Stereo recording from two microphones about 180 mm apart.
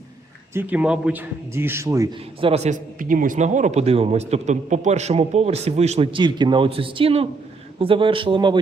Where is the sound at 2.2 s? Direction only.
35° right (ahead or behind).